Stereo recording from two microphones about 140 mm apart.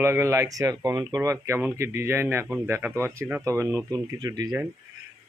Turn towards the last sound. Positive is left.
turn(degrees=-30)  # may be behind; listen again after turning